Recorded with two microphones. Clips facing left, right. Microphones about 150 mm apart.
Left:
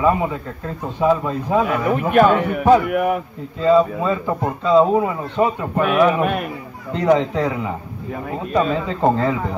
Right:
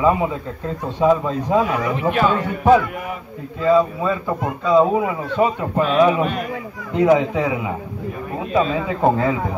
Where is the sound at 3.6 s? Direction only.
Centre (ahead or behind).